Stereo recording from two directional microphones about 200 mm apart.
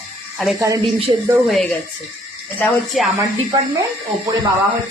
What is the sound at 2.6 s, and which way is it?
Speech, 5° left (ahead or behind).